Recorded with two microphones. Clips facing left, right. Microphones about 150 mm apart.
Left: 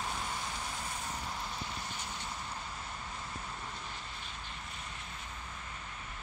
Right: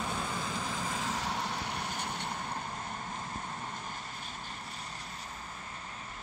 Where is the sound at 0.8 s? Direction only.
90° right; by 2.2 s 65° right (ahead or behind).